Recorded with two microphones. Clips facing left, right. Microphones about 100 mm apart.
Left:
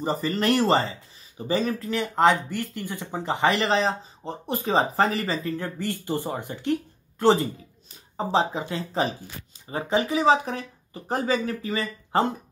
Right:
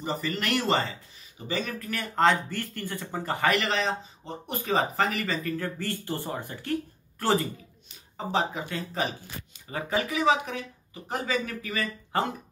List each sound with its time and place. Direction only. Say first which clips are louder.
0.0 s speech: left 6 dB; 35° left (ahead or behind); by 7.3 s 20° left (ahead or behind)
8.2 s speech: left 4 dB; 30° left (ahead or behind)